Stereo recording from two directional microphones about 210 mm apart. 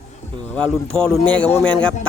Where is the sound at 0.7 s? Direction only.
5° left (ahead or behind).